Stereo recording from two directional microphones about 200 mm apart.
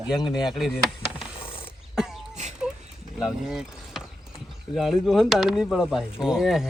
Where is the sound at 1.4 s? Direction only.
25° left (ahead or behind).